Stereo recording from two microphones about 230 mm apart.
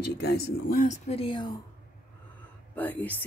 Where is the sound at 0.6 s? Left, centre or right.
Left.